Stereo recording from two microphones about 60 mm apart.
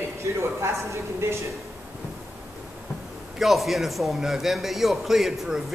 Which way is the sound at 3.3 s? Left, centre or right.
Centre.